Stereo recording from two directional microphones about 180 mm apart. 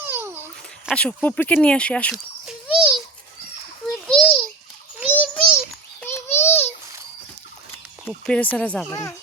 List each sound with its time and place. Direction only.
0.0 s babbling: 10° right (ahead or behind)
0.9 s speech: 5° left (ahead or behind)
2.1 s a sound: 5° right (ahead or behind)
4.0 s a sound: 5° left (ahead or behind)
8.0 s speech: 10° left (ahead or behind)
8.9 s speech: 15° left (ahead or behind)